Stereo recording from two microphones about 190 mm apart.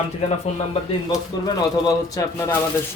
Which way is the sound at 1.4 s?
20° left (ahead or behind).